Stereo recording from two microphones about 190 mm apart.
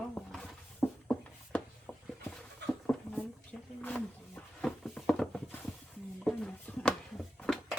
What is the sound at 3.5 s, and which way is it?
Wild animals, 5° left (ahead or behind).